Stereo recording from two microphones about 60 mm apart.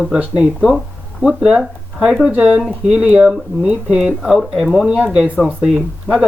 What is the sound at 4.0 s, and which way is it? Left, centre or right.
Speech, centre.